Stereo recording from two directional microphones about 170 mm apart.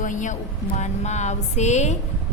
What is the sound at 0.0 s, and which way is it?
A woman's voice, 50° left (ahead or behind).